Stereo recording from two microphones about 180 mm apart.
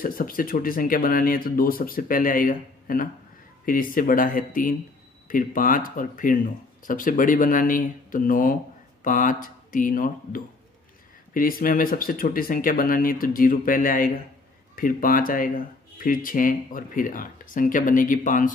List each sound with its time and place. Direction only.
0.0 s speech: 50° left (ahead or behind)